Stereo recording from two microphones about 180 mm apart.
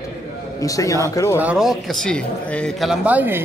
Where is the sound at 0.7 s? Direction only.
20° left (ahead or behind).